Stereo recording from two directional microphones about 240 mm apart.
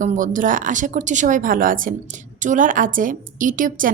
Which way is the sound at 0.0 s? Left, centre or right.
Right.